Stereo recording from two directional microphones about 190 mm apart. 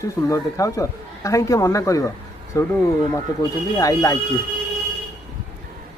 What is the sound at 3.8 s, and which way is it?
Speech, 20° left (ahead or behind).